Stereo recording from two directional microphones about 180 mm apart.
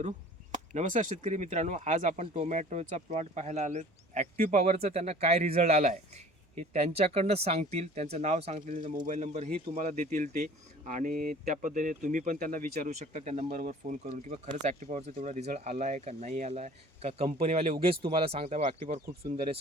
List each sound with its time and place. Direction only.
0.7 s speech: 40° right (ahead or behind)